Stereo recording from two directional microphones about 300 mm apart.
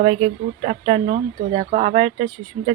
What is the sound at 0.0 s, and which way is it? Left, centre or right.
Speech, centre.